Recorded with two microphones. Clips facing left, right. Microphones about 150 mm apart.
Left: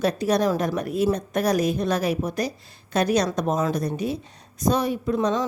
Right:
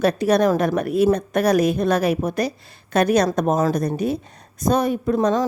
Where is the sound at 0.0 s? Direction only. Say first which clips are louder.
Right 4 dB; 60° right (ahead or behind).